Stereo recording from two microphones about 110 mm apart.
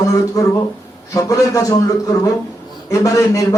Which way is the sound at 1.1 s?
30° left (ahead or behind).